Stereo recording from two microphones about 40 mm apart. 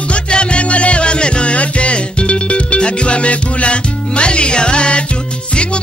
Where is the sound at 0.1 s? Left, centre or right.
Left.